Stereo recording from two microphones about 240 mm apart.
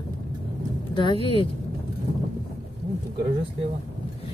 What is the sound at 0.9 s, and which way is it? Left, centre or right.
Speech, left.